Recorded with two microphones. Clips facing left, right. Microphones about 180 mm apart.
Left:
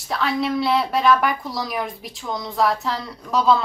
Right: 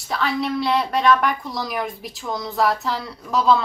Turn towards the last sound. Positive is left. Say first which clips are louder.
# even
turn(degrees=0)  # may be behind; listen again after turning